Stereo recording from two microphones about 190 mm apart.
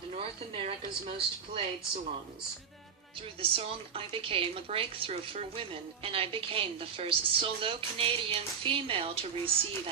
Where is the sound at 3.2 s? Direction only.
30° right (ahead or behind).